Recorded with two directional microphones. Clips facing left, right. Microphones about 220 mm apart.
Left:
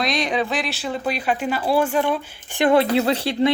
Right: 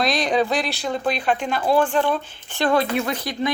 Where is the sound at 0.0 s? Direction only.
Centre (ahead or behind).